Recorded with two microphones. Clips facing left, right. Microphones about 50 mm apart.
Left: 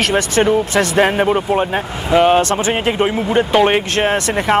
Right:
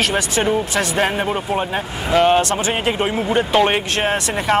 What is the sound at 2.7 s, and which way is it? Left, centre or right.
Speech, centre.